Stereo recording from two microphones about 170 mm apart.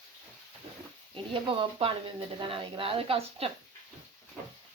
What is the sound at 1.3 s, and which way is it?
A woman's voice, 30° right (ahead or behind).